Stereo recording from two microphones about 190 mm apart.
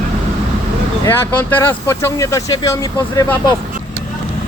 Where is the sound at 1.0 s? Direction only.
10° left (ahead or behind).